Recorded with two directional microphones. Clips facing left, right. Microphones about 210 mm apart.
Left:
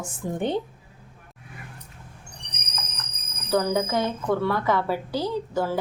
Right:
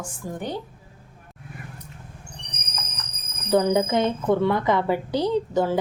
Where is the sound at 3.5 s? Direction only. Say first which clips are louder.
Right 3 dB; 20° right (ahead or behind).